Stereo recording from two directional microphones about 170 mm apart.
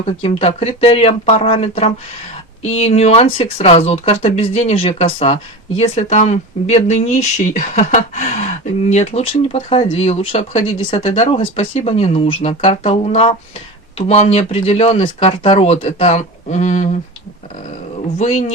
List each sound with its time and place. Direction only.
0.2 s speech: 35° left (ahead or behind)
18.2 s speech: 45° left (ahead or behind)